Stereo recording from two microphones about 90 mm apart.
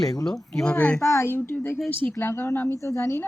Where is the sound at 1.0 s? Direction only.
35° left (ahead or behind).